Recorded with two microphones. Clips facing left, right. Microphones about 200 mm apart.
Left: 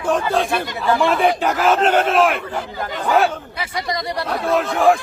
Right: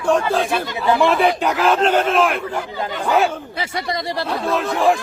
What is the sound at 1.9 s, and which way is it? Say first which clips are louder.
Speech: left 1 dB; centre (ahead or behind).